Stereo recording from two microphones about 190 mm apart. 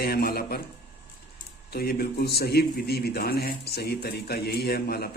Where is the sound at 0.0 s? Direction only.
55° left (ahead or behind).